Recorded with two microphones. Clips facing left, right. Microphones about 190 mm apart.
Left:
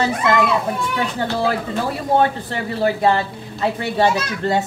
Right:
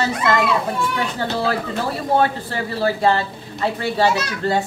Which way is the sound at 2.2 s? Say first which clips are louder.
Left 1 dB; 20° left (ahead or behind).